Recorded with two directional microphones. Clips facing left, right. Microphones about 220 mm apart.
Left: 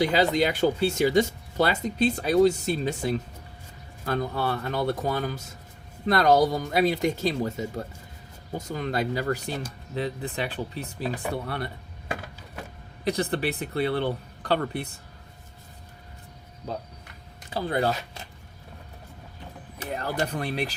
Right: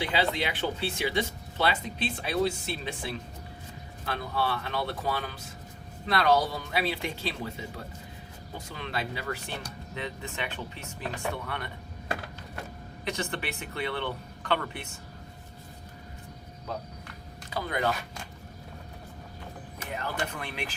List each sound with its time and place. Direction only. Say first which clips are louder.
0.0 s speech: left 7 dB; 40° left (ahead or behind)
11.0 s speech: left 4 dB; 5° left (ahead or behind)
11.3 s speech: left 4 dB; 35° left (ahead or behind)
13.1 s speech: left 7 dB; 35° left (ahead or behind)
17.5 s speech: left 4 dB; 30° left (ahead or behind)
19.8 s speech: left 5 dB; 40° left (ahead or behind)